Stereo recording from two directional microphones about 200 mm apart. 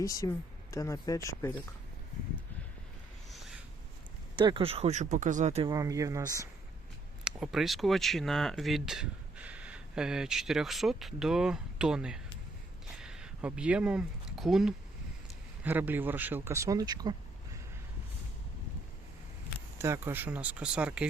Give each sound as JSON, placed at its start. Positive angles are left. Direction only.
{"t": 0.0, "sound": "speech", "side_deg": 15}
{"t": 4.4, "sound": "speech", "side_deg": -25}
{"t": 5.6, "sound": "speech", "side_deg": -15}
{"t": 7.3, "sound": "speech", "side_deg": -5}
{"t": 13.0, "sound": "a sound", "side_deg": -5}
{"t": 15.6, "sound": "speech", "side_deg": -10}
{"t": 19.8, "sound": "speech", "side_deg": -10}